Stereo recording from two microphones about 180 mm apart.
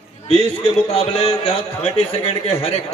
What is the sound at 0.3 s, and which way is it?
Speech, 35° left (ahead or behind).